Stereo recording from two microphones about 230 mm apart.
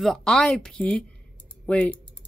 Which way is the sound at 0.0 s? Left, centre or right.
Centre.